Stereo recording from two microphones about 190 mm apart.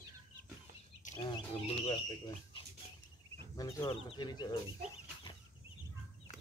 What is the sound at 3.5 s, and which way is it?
Speech, 20° left (ahead or behind).